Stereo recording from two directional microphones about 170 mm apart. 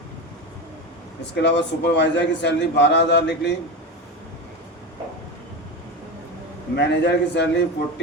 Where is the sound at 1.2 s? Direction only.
90° left.